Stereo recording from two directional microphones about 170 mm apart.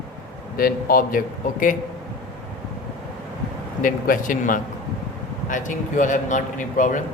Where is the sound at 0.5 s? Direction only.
60° left (ahead or behind).